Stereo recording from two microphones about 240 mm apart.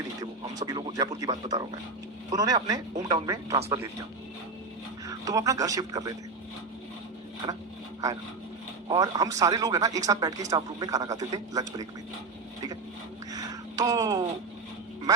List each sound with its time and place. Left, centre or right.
0.2 s speech: centre
5.0 s speech: centre
7.4 s speech: centre
8.9 s speech: centre
13.3 s a sound: centre